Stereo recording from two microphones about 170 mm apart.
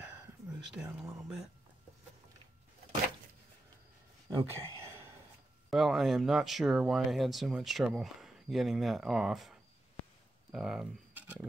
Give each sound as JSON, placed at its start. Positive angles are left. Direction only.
{"t": 0.7, "sound": "speech", "side_deg": -5}
{"t": 4.3, "sound": "speech", "side_deg": -20}
{"t": 5.7, "sound": "speech", "side_deg": 0}